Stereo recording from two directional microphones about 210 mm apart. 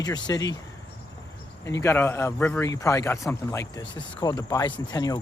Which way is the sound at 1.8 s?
10° left (ahead or behind).